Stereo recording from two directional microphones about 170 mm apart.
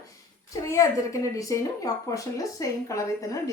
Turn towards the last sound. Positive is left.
turn(degrees=20)  # may be behind; listen again after turning